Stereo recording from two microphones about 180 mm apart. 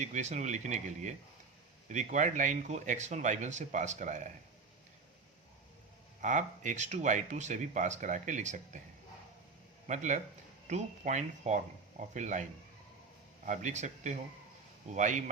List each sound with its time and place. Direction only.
0.0 s speech: 40° right (ahead or behind)
6.2 s speech: 45° right (ahead or behind)
9.8 s a man's voice: 40° right (ahead or behind)